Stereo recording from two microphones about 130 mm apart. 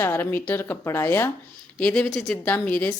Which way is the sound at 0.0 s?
15° left (ahead or behind).